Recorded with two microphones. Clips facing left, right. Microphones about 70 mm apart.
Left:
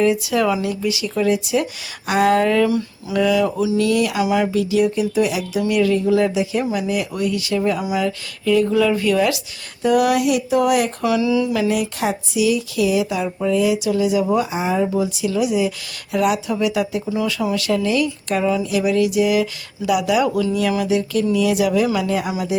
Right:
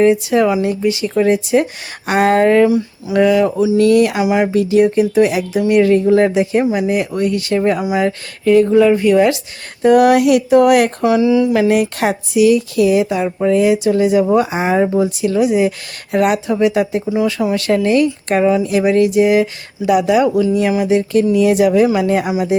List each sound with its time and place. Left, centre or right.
0.0 s speech: right
0.6 s speech: right
4.2 s speech: right
4.5 s speech: right
7.8 s speech: right
9.8 s speech: right
11.0 s speech: right
11.5 s speech: right
14.9 s speech: right
16.5 s speech: right